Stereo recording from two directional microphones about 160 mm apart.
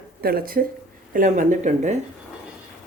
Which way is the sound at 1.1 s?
55° right (ahead or behind).